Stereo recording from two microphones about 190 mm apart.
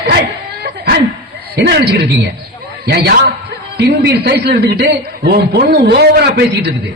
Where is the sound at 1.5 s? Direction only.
60° right (ahead or behind).